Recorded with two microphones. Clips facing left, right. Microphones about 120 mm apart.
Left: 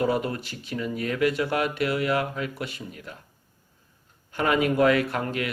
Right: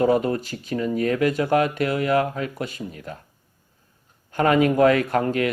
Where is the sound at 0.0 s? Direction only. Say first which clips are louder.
Right 6 dB; 40° right (ahead or behind).